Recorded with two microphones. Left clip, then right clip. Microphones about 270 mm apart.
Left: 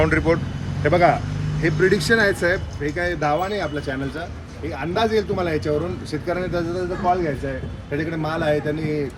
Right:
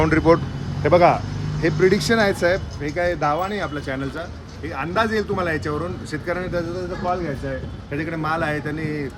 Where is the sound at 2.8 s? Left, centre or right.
Right.